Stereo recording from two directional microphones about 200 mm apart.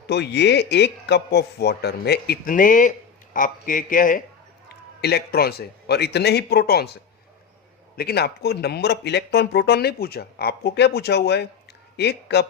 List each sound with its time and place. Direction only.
0.1 s a man's voice: 60° left (ahead or behind); by 4.2 s 45° left (ahead or behind)
4.9 s speech: 55° left (ahead or behind)